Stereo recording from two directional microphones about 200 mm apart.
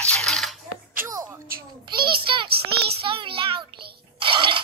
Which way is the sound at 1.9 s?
25° right (ahead or behind).